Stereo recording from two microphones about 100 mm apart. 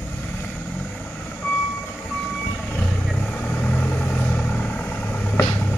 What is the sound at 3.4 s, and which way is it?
Vehicle, 15° left (ahead or behind).